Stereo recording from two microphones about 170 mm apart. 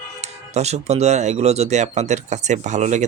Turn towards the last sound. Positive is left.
turn(degrees=-45)  # may be behind; listen again after turning